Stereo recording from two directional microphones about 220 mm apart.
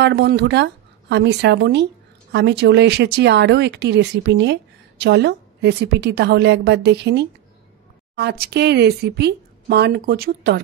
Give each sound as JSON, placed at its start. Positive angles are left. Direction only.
{"t": 0.0, "sound": "speech", "side_deg": -50}